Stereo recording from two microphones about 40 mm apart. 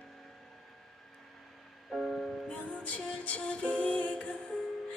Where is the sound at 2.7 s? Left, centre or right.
Left.